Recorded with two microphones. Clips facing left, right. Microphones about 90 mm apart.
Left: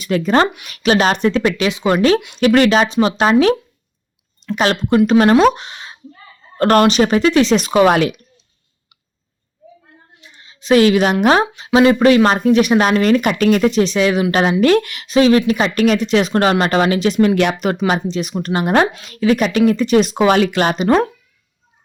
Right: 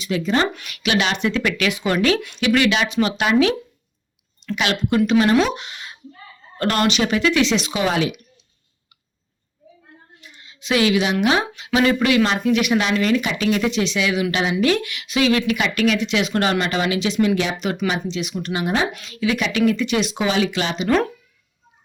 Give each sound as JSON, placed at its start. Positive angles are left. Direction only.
{"t": 0.0, "sound": "speech", "side_deg": 50}
{"t": 0.4, "sound": "speech", "side_deg": 20}
{"t": 0.7, "sound": "a woman's voice", "side_deg": 35}
{"t": 4.5, "sound": "a woman's voice", "side_deg": 40}
{"t": 10.2, "sound": "a woman's voice", "side_deg": 30}
{"t": 18.1, "sound": "speech", "side_deg": 40}
{"t": 20.8, "sound": "a woman's voice", "side_deg": 35}